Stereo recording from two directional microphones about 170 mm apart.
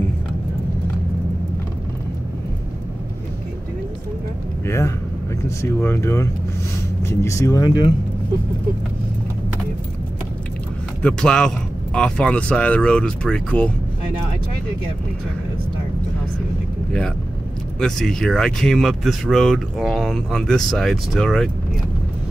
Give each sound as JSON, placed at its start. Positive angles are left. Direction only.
{"t": 4.6, "sound": "speech", "side_deg": 15}
{"t": 11.0, "sound": "speech", "side_deg": 5}
{"t": 17.7, "sound": "speech", "side_deg": 5}